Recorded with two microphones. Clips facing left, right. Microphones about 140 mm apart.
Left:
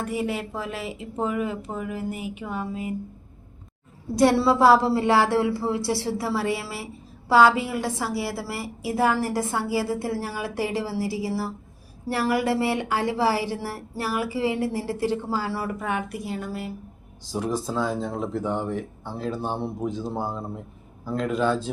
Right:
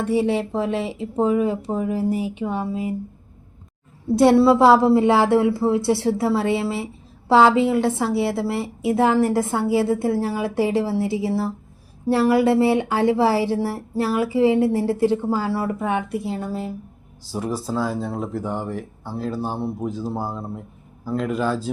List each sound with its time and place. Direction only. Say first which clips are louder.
0.1 s speech: right 8 dB; 30° right (ahead or behind)
4.1 s a woman's voice: right 5 dB; 25° right (ahead or behind)
17.3 s speech: right 1 dB; 5° right (ahead or behind)